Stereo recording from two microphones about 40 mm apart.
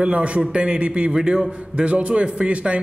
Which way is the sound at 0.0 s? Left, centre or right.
Right.